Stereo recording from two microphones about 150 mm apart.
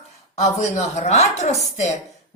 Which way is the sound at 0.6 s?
50° left (ahead or behind).